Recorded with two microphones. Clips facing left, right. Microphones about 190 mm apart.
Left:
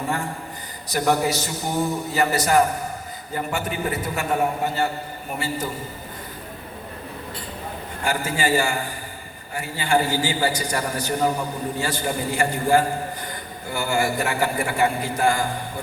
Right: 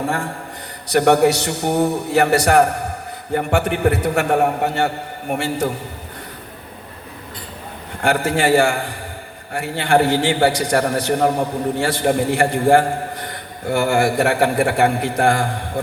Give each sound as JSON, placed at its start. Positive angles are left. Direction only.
{"t": 0.9, "sound": "a man's voice", "side_deg": -70}
{"t": 8.0, "sound": "a man's voice", "side_deg": -75}
{"t": 12.5, "sound": "a man's voice", "side_deg": -55}